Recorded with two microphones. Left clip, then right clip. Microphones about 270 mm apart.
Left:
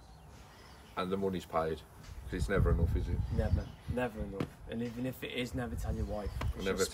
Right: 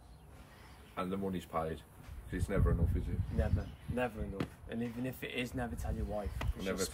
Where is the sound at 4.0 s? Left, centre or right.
Centre.